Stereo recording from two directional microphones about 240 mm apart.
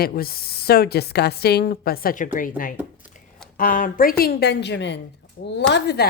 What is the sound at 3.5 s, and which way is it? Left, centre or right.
A woman's voice, left.